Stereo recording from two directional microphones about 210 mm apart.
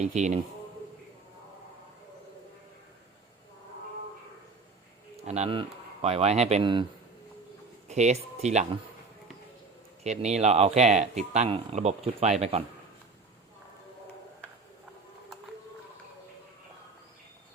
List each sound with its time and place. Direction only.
0.0 s speech: 35° right (ahead or behind)
5.2 s speech: 30° right (ahead or behind)
7.9 s speech: 30° right (ahead or behind)
10.0 s speech: 30° right (ahead or behind)